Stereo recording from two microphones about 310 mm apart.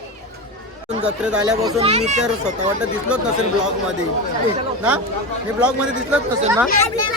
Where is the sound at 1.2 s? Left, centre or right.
Centre; by 2.2 s right.